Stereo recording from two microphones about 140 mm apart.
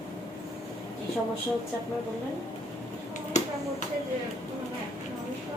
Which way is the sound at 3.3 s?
55° left (ahead or behind).